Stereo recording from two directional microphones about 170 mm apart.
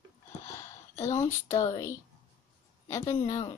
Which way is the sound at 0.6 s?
15° left (ahead or behind).